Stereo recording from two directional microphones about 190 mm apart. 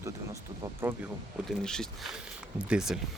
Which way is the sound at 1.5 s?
5° left (ahead or behind).